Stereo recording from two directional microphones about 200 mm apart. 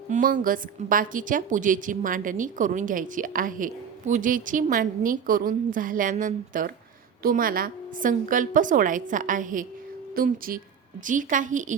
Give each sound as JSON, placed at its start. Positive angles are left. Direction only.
{"t": 0.1, "sound": "a woman's voice", "side_deg": -40}